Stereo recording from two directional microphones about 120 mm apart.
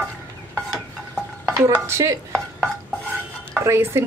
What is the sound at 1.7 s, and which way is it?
Speech, 25° right (ahead or behind).